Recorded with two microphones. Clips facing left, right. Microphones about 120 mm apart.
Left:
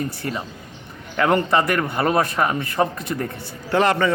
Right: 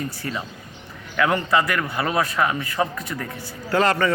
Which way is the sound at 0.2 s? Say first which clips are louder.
Left 2 dB; 30° left (ahead or behind).